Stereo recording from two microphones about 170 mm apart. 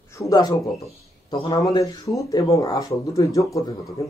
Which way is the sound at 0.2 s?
20° left (ahead or behind).